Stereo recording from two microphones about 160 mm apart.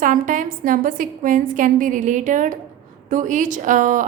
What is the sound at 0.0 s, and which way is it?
A woman's voice, 55° right (ahead or behind).